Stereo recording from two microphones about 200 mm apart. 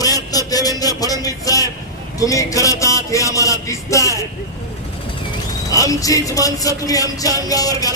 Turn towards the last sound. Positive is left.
turn(degrees=20)  # may be behind; listen again after turning